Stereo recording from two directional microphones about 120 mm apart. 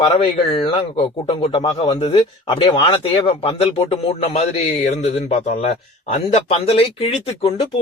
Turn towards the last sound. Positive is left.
turn(degrees=55)  # may be behind; listen again after turning